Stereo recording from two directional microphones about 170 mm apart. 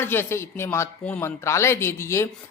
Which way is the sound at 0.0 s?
15° left (ahead or behind).